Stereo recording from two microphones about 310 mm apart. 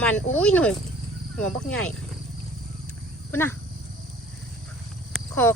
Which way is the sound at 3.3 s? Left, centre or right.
Centre.